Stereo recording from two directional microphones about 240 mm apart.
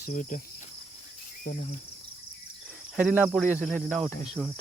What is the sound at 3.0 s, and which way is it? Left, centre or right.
Cricket, centre.